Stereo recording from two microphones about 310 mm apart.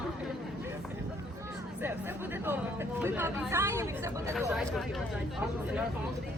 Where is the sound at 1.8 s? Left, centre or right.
Centre.